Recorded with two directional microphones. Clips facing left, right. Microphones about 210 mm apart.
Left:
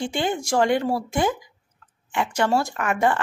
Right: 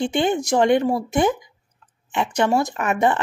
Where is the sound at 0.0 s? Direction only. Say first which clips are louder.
Right 5 dB; 20° right (ahead or behind).